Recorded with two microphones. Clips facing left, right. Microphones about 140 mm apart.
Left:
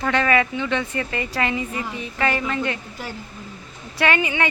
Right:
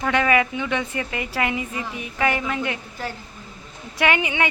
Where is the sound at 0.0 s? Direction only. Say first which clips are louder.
Even; 10° right (ahead or behind).